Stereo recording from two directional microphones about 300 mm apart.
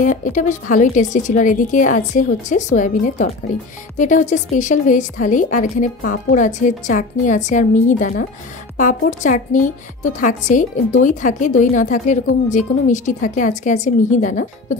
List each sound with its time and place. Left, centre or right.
0.0 s a woman's voice: left